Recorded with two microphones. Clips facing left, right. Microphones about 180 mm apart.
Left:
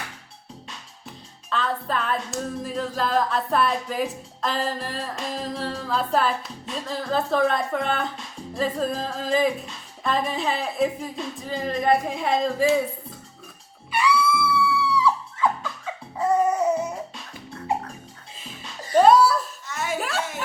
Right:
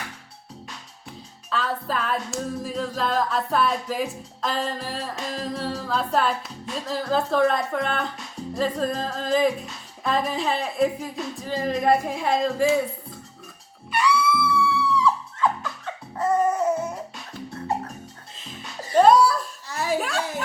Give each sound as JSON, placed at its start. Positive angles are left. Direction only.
{"t": 1.5, "sound": "music", "side_deg": 0}
{"t": 13.9, "sound": "music", "side_deg": 5}
{"t": 18.9, "sound": "laughter", "side_deg": 5}
{"t": 19.6, "sound": "chuckle", "side_deg": -35}
{"t": 20.0, "sound": "a sound", "side_deg": 0}